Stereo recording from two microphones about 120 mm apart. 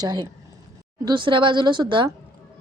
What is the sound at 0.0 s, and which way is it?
Speech, 35° right (ahead or behind).